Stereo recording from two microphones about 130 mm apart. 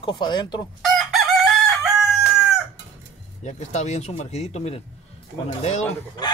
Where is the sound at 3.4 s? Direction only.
60° left (ahead or behind).